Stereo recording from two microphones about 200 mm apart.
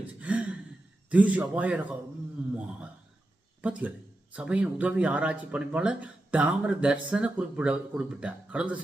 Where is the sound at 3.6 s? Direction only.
5° right (ahead or behind).